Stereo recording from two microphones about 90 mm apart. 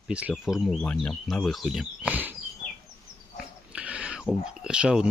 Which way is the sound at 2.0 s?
20° right (ahead or behind).